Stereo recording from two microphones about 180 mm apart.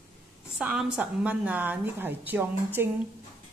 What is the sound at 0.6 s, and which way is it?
A woman's voice, 5° right (ahead or behind).